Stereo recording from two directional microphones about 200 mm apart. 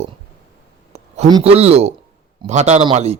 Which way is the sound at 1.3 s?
25° right (ahead or behind).